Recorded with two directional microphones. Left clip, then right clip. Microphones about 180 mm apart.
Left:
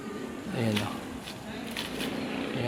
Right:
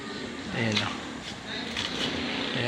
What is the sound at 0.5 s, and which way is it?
Speech, 20° left (ahead or behind).